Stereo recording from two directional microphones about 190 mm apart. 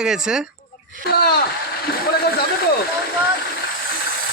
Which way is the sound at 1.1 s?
55° left (ahead or behind).